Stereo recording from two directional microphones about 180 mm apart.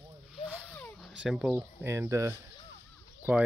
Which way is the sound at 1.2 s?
5° right (ahead or behind).